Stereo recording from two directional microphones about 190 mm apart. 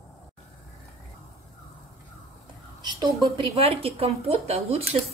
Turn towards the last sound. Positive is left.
turn(degrees=-35)  # may be behind; listen again after turning